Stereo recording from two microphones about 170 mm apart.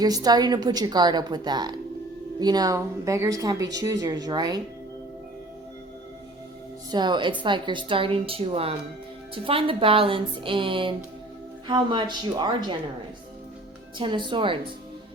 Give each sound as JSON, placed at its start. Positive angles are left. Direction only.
{"t": 0.0, "sound": "speech", "side_deg": -20}
{"t": 6.9, "sound": "speech", "side_deg": -25}
{"t": 14.0, "sound": "speech", "side_deg": -30}